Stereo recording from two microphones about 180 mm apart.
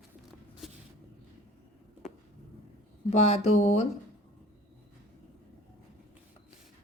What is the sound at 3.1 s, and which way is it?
Speech, 35° left (ahead or behind).